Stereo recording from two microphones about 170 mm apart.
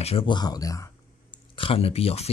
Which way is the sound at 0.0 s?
35° left (ahead or behind).